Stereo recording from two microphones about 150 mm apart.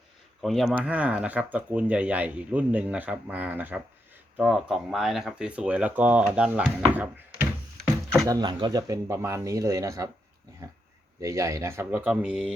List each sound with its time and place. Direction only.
0.4 s speech: centre (ahead or behind)
8.3 s speech: 30° right (ahead or behind)
11.2 s speech: 20° right (ahead or behind)